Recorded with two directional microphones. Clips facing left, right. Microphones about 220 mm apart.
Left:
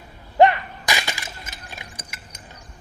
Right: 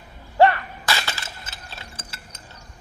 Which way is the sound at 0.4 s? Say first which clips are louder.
Left 1 dB; 15° left (ahead or behind).